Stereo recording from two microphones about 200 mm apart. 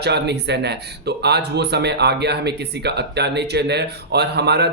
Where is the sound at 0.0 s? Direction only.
55° right (ahead or behind).